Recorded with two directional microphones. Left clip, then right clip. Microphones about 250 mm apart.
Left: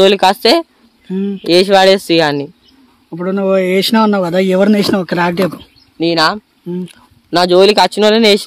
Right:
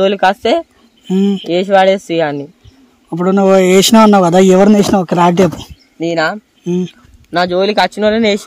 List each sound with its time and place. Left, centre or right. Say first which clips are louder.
0.0 s speech: left 2 dB; left
1.0 s speech: right 6 dB; right
1.4 s speech: left 2 dB; left
3.1 s speech: right 4 dB; right
4.6 s speech: right 2 dB; centre
5.9 s speech: left 2 dB; centre
6.6 s speech: right 6 dB; right
7.2 s speech: left 4 dB; left